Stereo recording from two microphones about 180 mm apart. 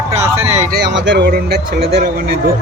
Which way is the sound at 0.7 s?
65° right (ahead or behind).